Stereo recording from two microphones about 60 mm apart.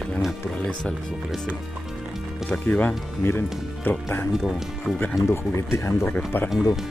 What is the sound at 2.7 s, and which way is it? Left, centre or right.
Speech, centre.